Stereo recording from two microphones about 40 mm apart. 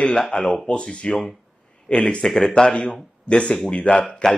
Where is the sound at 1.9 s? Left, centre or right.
Left.